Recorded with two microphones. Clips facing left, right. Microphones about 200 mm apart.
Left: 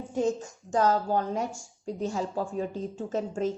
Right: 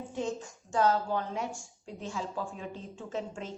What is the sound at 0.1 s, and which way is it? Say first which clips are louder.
Speech: left 8 dB; 45° left (ahead or behind).